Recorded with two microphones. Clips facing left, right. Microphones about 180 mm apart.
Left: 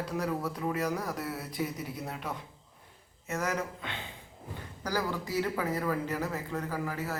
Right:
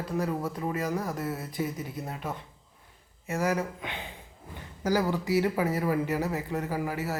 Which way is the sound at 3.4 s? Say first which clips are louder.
Right 5 dB; 10° right (ahead or behind).